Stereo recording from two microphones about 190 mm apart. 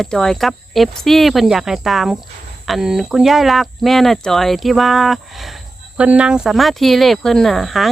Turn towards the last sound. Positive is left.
turn(degrees=0)  # may be behind; listen again after turning